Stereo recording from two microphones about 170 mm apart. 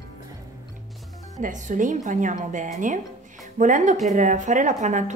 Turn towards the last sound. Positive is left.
turn(degrees=-45)  # may be behind; listen again after turning